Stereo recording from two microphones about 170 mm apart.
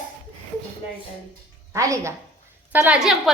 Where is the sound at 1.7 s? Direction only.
20° right (ahead or behind).